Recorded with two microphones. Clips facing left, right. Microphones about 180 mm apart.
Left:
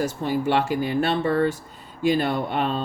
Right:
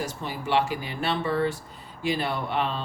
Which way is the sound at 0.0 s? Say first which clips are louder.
Left 8 dB; 50° left (ahead or behind).